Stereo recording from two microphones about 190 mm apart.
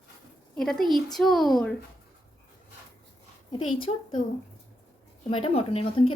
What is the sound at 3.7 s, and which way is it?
Speech, 30° left (ahead or behind).